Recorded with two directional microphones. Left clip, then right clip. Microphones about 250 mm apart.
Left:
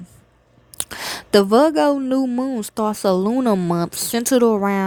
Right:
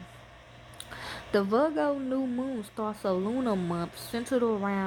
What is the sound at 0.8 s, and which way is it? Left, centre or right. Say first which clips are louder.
A woman's voice: left 12 dB; left.